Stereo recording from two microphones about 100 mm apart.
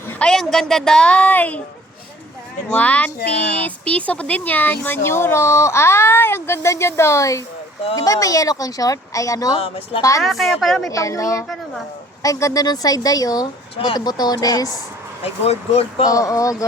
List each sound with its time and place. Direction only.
0.3 s a woman's voice: 5° left (ahead or behind)
2.7 s a woman's voice: 15° left (ahead or behind); by 9.6 s 35° left (ahead or behind)
9.6 s speech: 75° left (ahead or behind)
10.2 s a woman's voice: centre (ahead or behind)
10.8 s a woman's voice: 30° left (ahead or behind)
11.4 s a woman's voice: 5° left (ahead or behind)
12.2 s a woman's voice: 35° left (ahead or behind)
13.7 s speech: 55° left (ahead or behind); by 14.8 s 40° left (ahead or behind)
15.2 s speech: 90° left
16.0 s a woman's voice: 35° left (ahead or behind)